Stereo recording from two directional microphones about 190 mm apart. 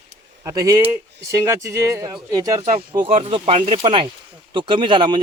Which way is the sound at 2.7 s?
30° right (ahead or behind).